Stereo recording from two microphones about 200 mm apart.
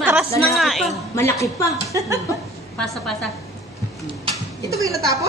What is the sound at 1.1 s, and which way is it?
Speech, 15° left (ahead or behind).